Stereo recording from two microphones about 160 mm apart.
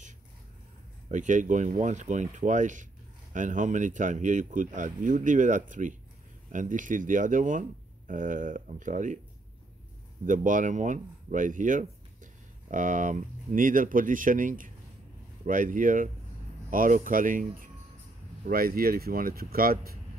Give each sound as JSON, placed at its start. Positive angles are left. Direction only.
{"t": 1.0, "sound": "speech", "side_deg": -50}
{"t": 10.2, "sound": "speech", "side_deg": -55}
{"t": 18.5, "sound": "speech", "side_deg": -65}